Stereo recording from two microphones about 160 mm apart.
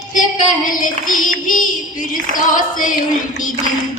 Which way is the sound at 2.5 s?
55° left (ahead or behind).